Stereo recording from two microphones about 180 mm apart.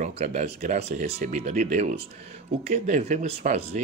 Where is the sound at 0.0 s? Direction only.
40° right (ahead or behind).